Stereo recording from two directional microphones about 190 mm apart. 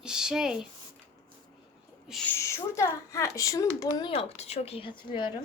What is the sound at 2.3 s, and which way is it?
Speech, 15° left (ahead or behind).